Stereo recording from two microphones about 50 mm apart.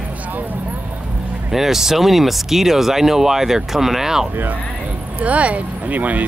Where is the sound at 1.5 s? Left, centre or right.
Centre.